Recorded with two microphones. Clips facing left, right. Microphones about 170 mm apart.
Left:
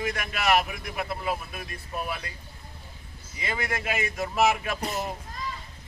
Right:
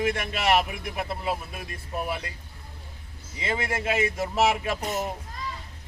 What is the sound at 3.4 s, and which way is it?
Speech, 25° right (ahead or behind).